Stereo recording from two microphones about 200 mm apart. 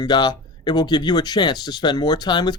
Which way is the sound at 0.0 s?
20° left (ahead or behind).